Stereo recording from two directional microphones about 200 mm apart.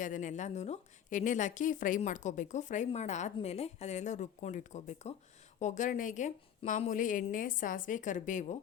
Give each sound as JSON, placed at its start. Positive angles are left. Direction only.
{"t": 0.0, "sound": "a woman's voice", "side_deg": 40}